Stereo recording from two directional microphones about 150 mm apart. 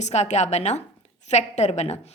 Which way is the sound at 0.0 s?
50° left (ahead or behind).